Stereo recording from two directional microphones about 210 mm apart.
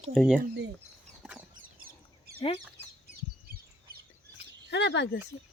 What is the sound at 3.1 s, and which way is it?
Bird, 45° right (ahead or behind).